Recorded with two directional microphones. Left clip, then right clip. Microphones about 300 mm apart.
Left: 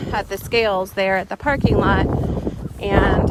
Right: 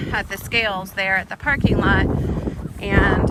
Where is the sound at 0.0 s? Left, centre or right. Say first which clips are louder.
Left 1 dB; centre.